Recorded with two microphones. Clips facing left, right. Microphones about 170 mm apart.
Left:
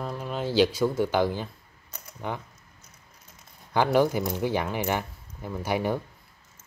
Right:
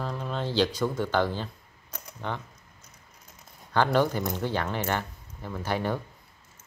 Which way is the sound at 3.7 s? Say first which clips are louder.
Left 2 dB; 10° left (ahead or behind).